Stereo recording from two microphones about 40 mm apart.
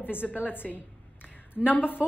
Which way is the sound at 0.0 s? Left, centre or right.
Left.